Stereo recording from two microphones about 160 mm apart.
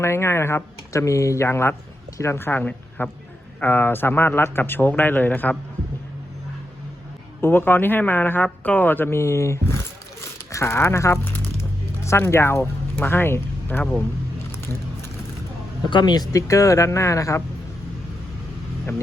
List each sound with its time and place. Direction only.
0.0 s speech: 15° left (ahead or behind)
7.4 s speech: 15° left (ahead or behind)
15.8 s speech: 30° left (ahead or behind)